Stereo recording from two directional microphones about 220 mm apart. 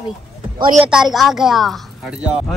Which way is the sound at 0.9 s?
Centre (ahead or behind).